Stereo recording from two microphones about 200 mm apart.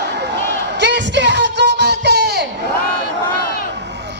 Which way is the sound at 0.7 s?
60° right (ahead or behind).